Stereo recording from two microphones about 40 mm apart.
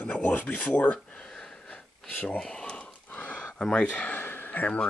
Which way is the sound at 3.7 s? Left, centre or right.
Left.